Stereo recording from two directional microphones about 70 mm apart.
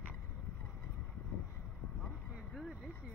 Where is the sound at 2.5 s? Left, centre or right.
Centre.